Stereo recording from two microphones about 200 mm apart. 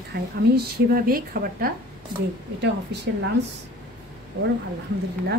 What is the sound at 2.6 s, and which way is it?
Speech, 60° right (ahead or behind).